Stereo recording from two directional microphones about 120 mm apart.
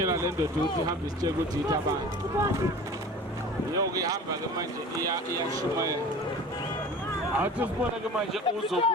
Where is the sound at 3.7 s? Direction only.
30° right (ahead or behind).